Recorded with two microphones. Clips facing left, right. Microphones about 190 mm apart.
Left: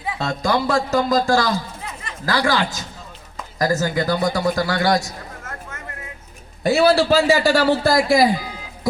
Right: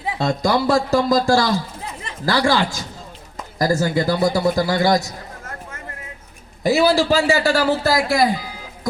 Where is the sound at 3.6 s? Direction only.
30° right (ahead or behind).